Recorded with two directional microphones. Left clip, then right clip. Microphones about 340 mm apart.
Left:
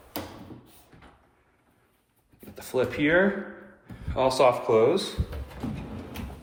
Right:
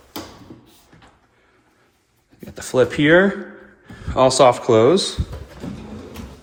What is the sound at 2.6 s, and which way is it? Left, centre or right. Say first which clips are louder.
A man's voice: right 9 dB; right.